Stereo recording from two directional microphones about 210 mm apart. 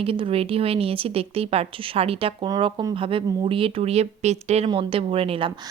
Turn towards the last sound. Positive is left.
turn(degrees=-25)  # may be behind; listen again after turning